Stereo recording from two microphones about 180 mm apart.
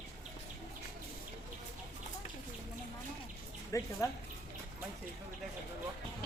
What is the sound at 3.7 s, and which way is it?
Speech, 15° left (ahead or behind).